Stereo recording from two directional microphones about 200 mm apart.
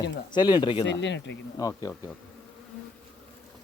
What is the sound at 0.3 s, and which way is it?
Speech, 20° left (ahead or behind).